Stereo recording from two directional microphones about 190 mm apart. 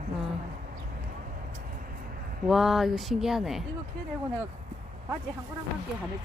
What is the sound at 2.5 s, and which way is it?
Speech, centre (ahead or behind).